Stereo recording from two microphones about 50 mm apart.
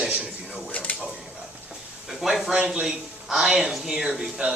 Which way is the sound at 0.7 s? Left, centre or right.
Left.